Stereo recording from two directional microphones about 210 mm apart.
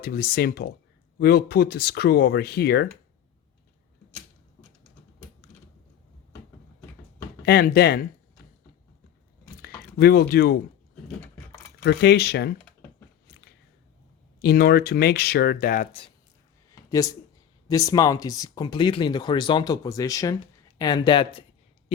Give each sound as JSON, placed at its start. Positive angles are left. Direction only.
{"t": 0.0, "sound": "speech", "side_deg": 45}
{"t": 5.4, "sound": "a sound", "side_deg": 50}
{"t": 7.4, "sound": "speech", "side_deg": 50}
{"t": 9.6, "sound": "a sound", "side_deg": 50}
{"t": 11.8, "sound": "speech", "side_deg": 50}
{"t": 14.4, "sound": "speech", "side_deg": 50}
{"t": 15.9, "sound": "speech", "side_deg": 25}
{"t": 16.7, "sound": "a sound", "side_deg": 15}
{"t": 17.7, "sound": "speech", "side_deg": 15}